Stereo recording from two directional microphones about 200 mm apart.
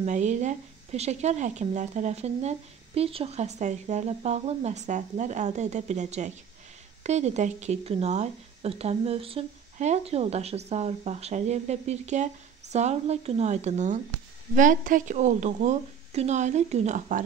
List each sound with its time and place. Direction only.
0.0 s speech: 35° right (ahead or behind)